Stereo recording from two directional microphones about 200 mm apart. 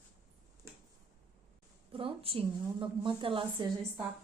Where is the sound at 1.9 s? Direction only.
25° right (ahead or behind).